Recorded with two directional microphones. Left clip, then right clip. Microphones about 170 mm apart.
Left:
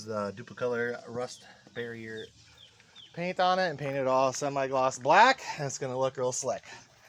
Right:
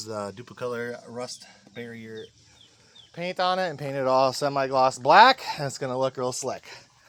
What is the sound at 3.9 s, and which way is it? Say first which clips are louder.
Speech: right 6 dB; 40° right (ahead or behind).